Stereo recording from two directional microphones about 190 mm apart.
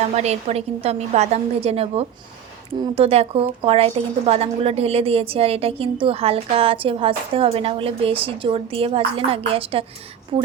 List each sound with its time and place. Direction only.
0.1 s a woman's voice: 35° right (ahead or behind)